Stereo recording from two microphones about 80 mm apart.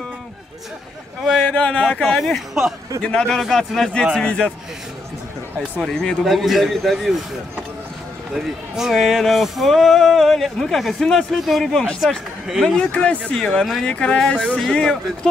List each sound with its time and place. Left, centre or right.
1.5 s speech: centre
2.0 s speech: centre
3.0 s speech: centre
4.2 s speech: centre
5.8 s speech: centre
8.4 s speech: centre
12.6 s speech: centre
13.3 s speech: centre